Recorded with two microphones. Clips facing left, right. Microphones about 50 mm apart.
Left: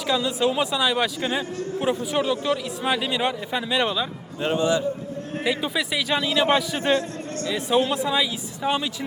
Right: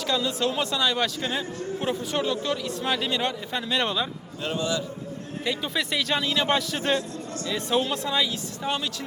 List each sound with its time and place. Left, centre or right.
0.1 s speech: centre
4.4 s a man's voice: left
5.5 s a man's voice: centre